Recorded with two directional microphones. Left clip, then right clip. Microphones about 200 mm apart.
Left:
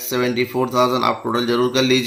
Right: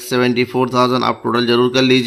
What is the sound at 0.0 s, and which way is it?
Speech, 45° right (ahead or behind).